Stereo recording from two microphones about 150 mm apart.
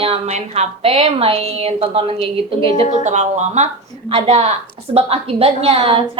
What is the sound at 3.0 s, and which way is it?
A woman's voice, 50° right (ahead or behind).